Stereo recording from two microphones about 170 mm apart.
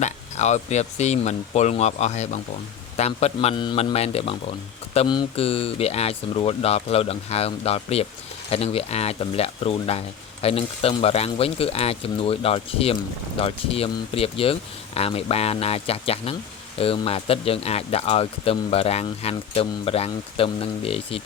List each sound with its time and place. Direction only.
0.0 s speech: 40° left (ahead or behind)